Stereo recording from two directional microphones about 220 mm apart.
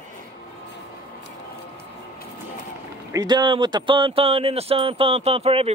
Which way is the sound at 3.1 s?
15° right (ahead or behind).